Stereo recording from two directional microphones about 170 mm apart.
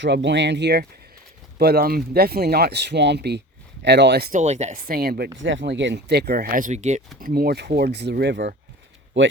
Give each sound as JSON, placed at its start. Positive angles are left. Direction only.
{"t": 0.0, "sound": "speech", "side_deg": -90}
{"t": 1.5, "sound": "speech", "side_deg": -65}
{"t": 4.3, "sound": "speech", "side_deg": -45}
{"t": 4.9, "sound": "speech", "side_deg": -65}
{"t": 5.4, "sound": "speech", "side_deg": -90}
{"t": 7.2, "sound": "speech", "side_deg": -60}